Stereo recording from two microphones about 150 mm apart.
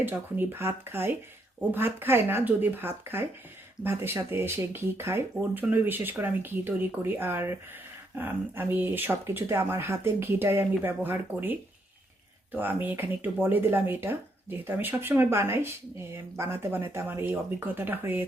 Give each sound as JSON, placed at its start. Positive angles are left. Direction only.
{"t": 0.0, "sound": "speech", "side_deg": -15}